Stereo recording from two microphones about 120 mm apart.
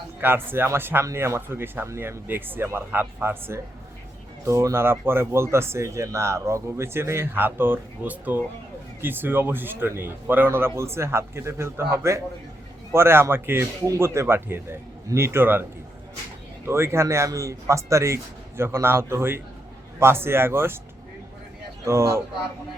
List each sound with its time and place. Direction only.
0.2 s speech: 20° right (ahead or behind)
16.6 s speech: 20° right (ahead or behind)
21.8 s speech: 25° right (ahead or behind)